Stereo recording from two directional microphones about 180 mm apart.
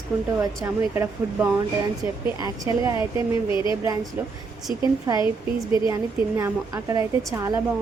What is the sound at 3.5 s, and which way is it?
Speech, 25° left (ahead or behind).